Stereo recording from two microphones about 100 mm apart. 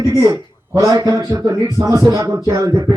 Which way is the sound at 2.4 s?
30° right (ahead or behind).